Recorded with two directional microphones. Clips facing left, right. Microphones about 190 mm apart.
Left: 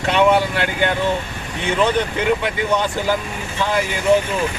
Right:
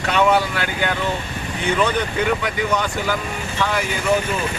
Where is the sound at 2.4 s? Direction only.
25° left (ahead or behind).